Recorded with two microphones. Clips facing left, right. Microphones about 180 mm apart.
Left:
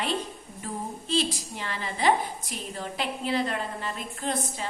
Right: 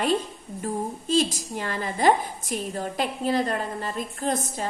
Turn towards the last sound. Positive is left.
turn(degrees=-40)  # may be behind; listen again after turning